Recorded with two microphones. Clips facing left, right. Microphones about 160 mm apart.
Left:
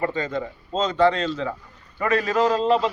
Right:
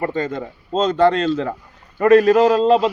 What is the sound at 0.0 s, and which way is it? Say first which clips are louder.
A man's voice: right 3 dB; 45° right (ahead or behind).